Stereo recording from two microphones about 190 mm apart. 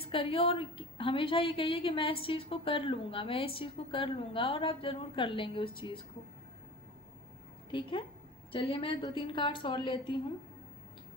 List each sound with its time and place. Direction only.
0.0 s a woman's voice: 30° left (ahead or behind)
7.7 s a woman's voice: 25° left (ahead or behind)